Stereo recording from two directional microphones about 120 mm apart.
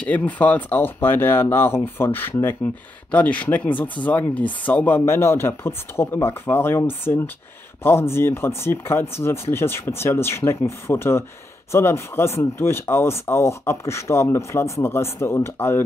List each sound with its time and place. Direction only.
0.0 s speech: 10° left (ahead or behind)